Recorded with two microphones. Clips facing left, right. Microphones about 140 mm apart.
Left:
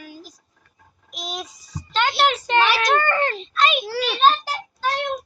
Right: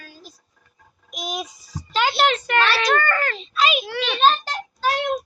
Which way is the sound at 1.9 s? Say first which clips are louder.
Even; 5° right (ahead or behind).